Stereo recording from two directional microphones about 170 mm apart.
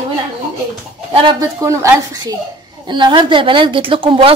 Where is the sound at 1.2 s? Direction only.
25° right (ahead or behind).